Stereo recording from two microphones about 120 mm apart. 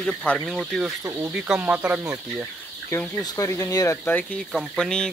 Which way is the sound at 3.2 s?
30° left (ahead or behind).